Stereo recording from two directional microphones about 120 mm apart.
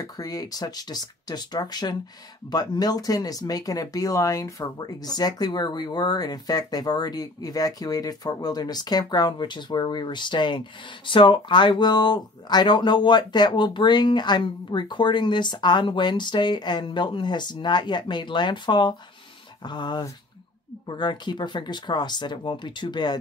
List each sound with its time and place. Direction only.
0.0 s speech: 30° left (ahead or behind)